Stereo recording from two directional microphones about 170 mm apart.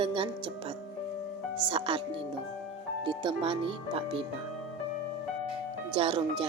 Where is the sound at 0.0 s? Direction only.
30° right (ahead or behind).